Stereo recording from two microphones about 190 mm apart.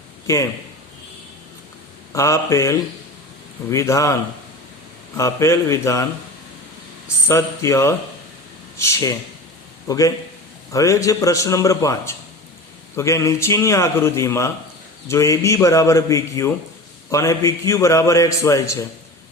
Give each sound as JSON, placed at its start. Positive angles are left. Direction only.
{"t": 0.3, "sound": "a man's voice", "side_deg": 15}
{"t": 2.1, "sound": "a man's voice", "side_deg": 15}
{"t": 7.3, "sound": "a man's voice", "side_deg": 15}